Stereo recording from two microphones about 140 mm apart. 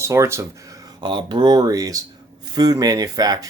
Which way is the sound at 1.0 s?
35° right (ahead or behind).